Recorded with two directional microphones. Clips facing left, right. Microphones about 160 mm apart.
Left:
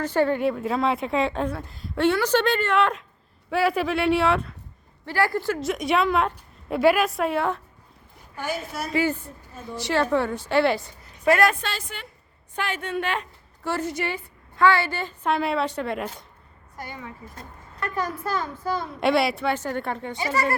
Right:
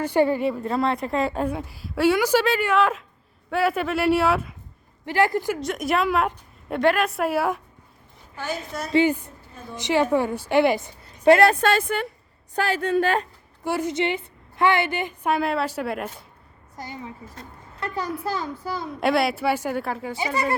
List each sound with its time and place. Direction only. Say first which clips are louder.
0.0 s a woman's voice: right 2 dB; 10° right (ahead or behind)
0.3 s speech: even; centre (ahead or behind)
5.0 s a woman's voice: right 2 dB; 20° right (ahead or behind)
5.5 s speech: left 1 dB; centre (ahead or behind)
8.4 s a woman's voice: even; 10° left (ahead or behind)
9.0 s a woman's voice: right 3 dB; 15° right (ahead or behind)
11.3 s a woman's voice: right 4 dB; 30° right (ahead or behind)
11.6 s speech: right 12 dB; 55° right (ahead or behind)
12.5 s a woman's voice: right 6 dB; 35° right (ahead or behind)
13.7 s a woman's voice: right 3 dB; 10° right (ahead or behind)
15.3 s speech: even; 5° right (ahead or behind)
17.7 s a woman's voice: even; 20° right (ahead or behind)
18.9 s speech: right 1 dB; centre (ahead or behind)
20.1 s a woman's voice: left 1 dB; 15° right (ahead or behind)